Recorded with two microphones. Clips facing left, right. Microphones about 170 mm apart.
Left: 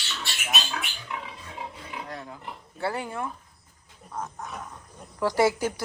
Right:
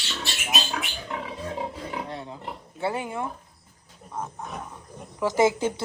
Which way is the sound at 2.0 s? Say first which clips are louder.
Right 3 dB; 25° right (ahead or behind).